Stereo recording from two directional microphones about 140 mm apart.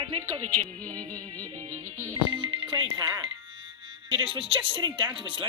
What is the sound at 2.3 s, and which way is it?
Speech, 40° right (ahead or behind).